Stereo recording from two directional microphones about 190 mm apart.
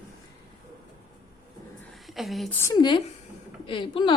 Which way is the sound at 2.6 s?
20° left (ahead or behind).